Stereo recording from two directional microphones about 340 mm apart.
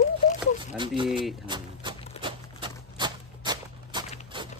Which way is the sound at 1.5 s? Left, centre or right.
Centre.